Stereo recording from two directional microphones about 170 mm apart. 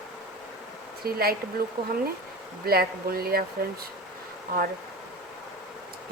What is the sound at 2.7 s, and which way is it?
Speech, 65° right (ahead or behind).